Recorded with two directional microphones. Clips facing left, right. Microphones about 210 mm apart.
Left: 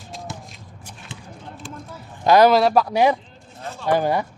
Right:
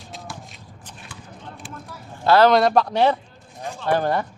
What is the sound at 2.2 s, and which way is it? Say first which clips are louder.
Speech: left 1 dB; 15° left (ahead or behind).